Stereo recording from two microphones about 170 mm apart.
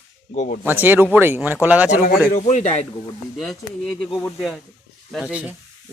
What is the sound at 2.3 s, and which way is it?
Speech, 45° left (ahead or behind).